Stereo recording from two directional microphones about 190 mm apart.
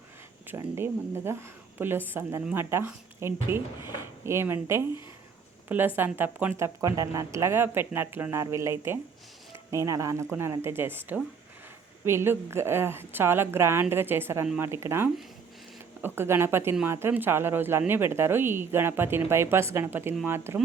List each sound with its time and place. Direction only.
0.8 s a woman's voice: 15° right (ahead or behind)